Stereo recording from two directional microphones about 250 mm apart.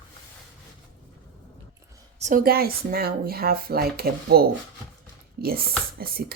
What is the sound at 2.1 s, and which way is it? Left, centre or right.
Speech, right.